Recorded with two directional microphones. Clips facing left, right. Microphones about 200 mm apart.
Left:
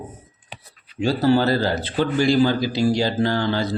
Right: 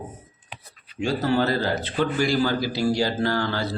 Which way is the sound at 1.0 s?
35° left (ahead or behind).